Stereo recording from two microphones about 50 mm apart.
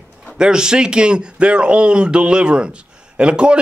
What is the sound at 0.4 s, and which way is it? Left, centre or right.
Speech, centre.